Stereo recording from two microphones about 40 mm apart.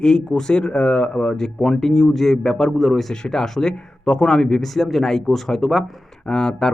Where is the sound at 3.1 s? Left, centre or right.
Centre.